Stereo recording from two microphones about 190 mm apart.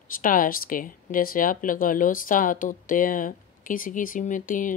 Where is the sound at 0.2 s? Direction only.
45° left (ahead or behind).